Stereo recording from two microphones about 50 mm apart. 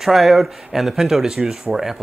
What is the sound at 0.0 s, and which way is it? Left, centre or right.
Speech, centre.